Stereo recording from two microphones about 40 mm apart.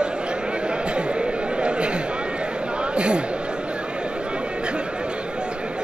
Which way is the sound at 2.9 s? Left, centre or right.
Right.